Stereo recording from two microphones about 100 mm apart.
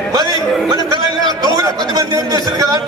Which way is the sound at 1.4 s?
40° right (ahead or behind).